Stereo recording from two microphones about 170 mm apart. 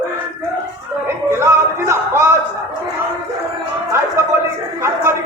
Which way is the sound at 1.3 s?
15° right (ahead or behind).